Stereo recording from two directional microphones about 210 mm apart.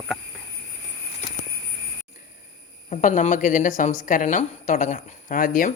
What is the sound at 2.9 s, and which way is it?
Speech, 40° left (ahead or behind).